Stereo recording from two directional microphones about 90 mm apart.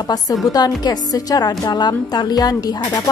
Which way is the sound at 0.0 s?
50° left (ahead or behind).